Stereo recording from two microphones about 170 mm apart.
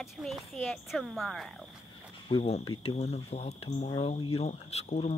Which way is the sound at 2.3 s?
30° left (ahead or behind).